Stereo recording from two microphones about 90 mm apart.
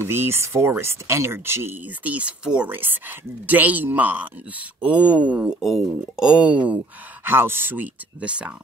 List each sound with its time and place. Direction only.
0.0 s speech: 30° right (ahead or behind); by 2.7 s 10° right (ahead or behind)
2.7 s speech: 25° right (ahead or behind)
7.2 s speech: 25° right (ahead or behind)